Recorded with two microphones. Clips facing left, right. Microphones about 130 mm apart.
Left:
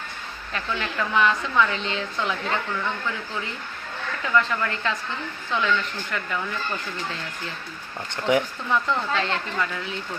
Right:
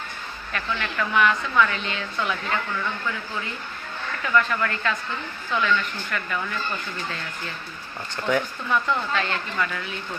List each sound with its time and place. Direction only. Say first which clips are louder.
0.5 s speech: even; 25° left (ahead or behind)
4.4 s speech: right 1 dB; 20° left (ahead or behind)
8.1 s speech: left 2 dB; 20° left (ahead or behind)